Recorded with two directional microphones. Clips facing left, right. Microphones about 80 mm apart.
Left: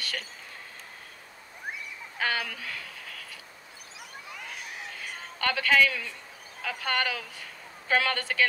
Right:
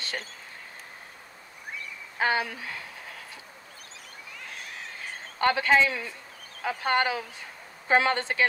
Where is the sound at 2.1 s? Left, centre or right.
Right.